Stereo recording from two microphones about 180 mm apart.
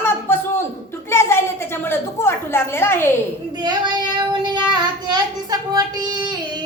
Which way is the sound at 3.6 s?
25° right (ahead or behind).